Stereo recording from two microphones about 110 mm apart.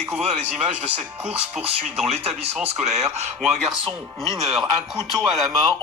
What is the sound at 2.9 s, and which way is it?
Speech, 90° right.